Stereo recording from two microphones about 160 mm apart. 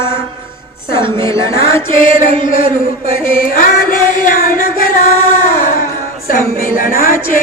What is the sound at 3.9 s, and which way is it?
Music, 60° left (ahead or behind).